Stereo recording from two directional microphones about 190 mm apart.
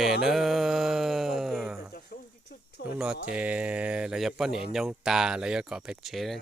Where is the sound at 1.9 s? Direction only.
55° left (ahead or behind).